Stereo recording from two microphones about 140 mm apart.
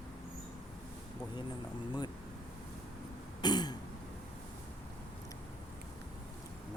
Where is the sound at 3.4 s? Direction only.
30° left (ahead or behind).